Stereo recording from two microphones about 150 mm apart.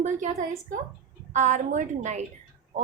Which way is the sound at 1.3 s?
55° right (ahead or behind).